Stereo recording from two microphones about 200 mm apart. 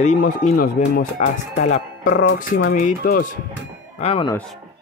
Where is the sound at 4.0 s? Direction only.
30° left (ahead or behind).